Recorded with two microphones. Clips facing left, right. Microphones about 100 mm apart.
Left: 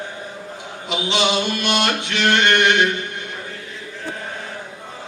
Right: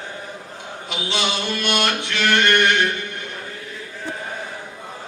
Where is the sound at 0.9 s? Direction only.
20° left (ahead or behind).